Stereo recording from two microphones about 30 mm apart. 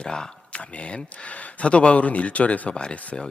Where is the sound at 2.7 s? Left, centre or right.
Left.